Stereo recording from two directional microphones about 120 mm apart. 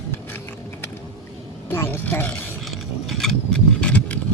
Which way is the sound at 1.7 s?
20° left (ahead or behind).